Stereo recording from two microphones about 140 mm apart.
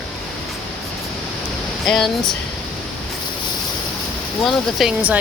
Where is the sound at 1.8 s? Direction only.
5° left (ahead or behind).